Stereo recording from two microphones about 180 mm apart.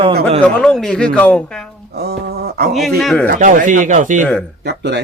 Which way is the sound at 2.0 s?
60° right (ahead or behind).